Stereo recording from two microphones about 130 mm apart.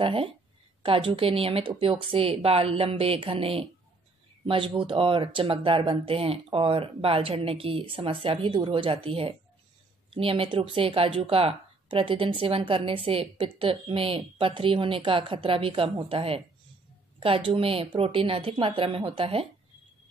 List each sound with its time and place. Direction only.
0.0 s speech: 45° right (ahead or behind)